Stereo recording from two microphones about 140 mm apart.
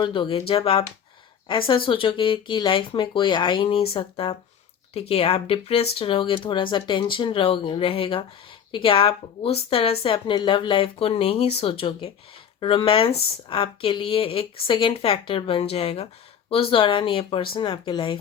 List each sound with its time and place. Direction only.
0.0 s speech: 35° left (ahead or behind)